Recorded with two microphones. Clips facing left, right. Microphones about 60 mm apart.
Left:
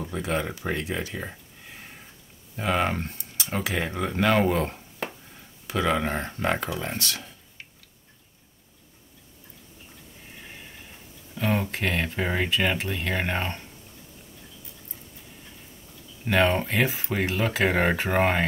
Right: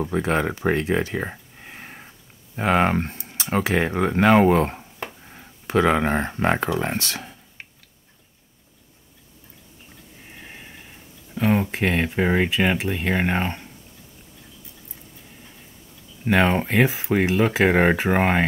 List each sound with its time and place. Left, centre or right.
0.0 s speech: right
6.7 s speech: right
7.0 s a sound: right
10.3 s a sound: centre
11.3 s speech: centre
16.3 s speech: centre